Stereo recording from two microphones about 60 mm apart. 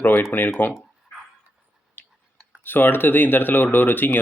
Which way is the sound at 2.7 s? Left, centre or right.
Left.